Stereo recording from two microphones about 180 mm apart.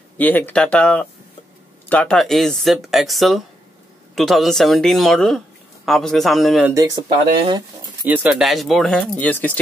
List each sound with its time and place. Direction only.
0.2 s speech: 10° left (ahead or behind)
6.7 s speech: 20° right (ahead or behind)
8.0 s speech: 10° right (ahead or behind); by 9.6 s 10° left (ahead or behind)